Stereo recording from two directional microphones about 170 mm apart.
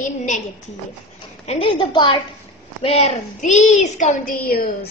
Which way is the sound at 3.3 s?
50° left (ahead or behind).